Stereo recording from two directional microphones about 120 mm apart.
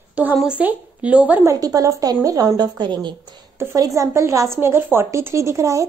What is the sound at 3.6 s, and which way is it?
A woman's voice, 25° right (ahead or behind).